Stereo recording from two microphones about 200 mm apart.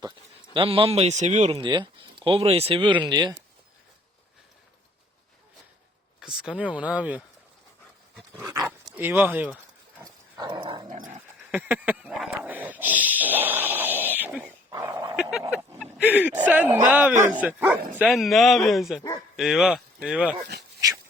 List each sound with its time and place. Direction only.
0.5 s a man's voice: 25° right (ahead or behind)
1.5 s speech: 20° right (ahead or behind)
6.1 s speech: 5° right (ahead or behind)
8.1 s dog: 10° right (ahead or behind)
10.0 s dog: 20° right (ahead or behind)
10.8 s dog: 40° right (ahead or behind)
11.5 s dog: 5° right (ahead or behind)
14.7 s dog: 20° right (ahead or behind)
15.1 s speech: 5° right (ahead or behind)